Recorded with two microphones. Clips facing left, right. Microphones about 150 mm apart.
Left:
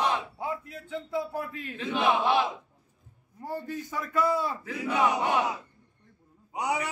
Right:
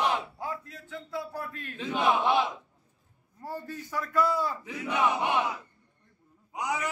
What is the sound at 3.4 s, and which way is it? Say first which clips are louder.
Speech: left 3 dB; 20° left (ahead or behind).